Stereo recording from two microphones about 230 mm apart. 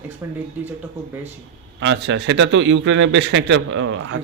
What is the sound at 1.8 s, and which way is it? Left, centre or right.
A man's voice, right.